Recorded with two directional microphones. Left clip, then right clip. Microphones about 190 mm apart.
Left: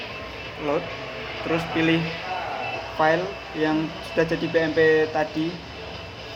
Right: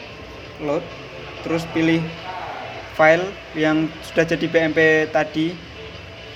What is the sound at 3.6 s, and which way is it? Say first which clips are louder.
Speech: right 5 dB; 45° right (ahead or behind).